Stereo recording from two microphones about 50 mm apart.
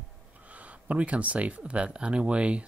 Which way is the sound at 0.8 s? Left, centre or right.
Right.